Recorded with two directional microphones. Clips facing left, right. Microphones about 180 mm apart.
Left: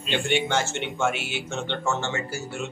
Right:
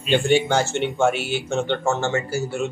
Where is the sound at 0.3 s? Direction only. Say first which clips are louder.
Right 4 dB; 35° right (ahead or behind).